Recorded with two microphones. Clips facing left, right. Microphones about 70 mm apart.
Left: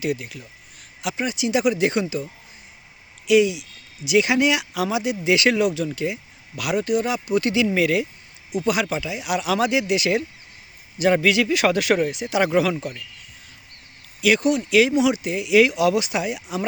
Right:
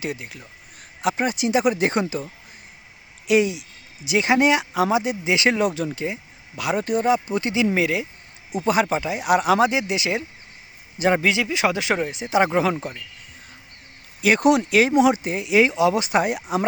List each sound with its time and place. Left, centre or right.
0.0 s speech: right
3.2 s speech: right
5.5 s speech: right
5.9 s speech: right
8.5 s speech: right
14.2 s speech: right